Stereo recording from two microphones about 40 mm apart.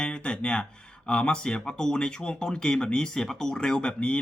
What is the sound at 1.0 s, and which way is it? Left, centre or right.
Speech, left.